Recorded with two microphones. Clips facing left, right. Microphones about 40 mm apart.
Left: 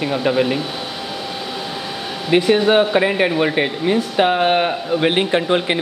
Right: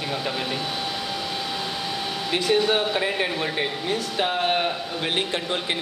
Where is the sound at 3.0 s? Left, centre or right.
Left.